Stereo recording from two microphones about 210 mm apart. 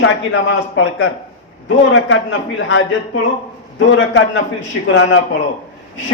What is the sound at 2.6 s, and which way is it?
A man's voice, 70° left (ahead or behind).